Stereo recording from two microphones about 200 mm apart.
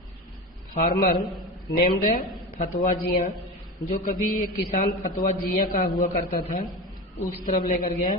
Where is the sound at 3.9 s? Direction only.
40° left (ahead or behind).